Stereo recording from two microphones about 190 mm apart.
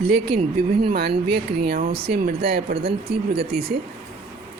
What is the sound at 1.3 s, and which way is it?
Speech, 55° right (ahead or behind).